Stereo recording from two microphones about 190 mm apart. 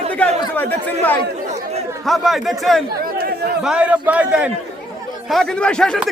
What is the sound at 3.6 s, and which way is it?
A man's voice, 5° right (ahead or behind).